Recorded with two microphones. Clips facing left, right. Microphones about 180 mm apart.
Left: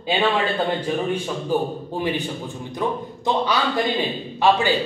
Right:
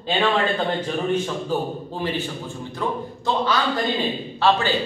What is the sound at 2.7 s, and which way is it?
A man's voice, 15° left (ahead or behind).